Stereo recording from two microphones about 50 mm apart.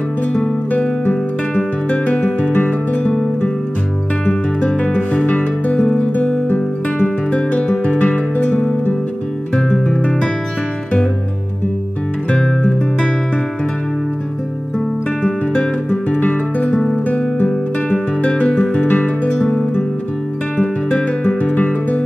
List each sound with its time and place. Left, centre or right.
1.9 s music: left
4.3 s music: left
15.2 s guitar: centre
16.9 s music: left
17.5 s guitar: centre
18.9 s music: left
20.5 s music: centre